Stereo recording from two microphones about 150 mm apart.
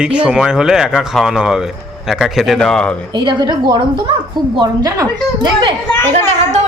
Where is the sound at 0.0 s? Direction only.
10° right (ahead or behind).